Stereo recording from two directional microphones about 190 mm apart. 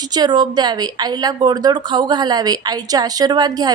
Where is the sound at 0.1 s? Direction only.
20° right (ahead or behind).